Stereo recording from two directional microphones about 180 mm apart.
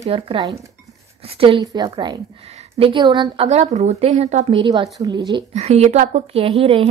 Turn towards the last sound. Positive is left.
turn(degrees=-30)  # may be behind; listen again after turning